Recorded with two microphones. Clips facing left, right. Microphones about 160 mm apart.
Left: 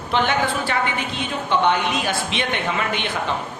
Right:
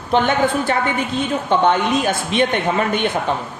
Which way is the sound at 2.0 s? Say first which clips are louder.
Right 6 dB; 45° right (ahead or behind).